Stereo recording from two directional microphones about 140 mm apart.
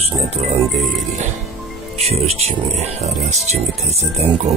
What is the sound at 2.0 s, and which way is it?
Speech, 50° right (ahead or behind).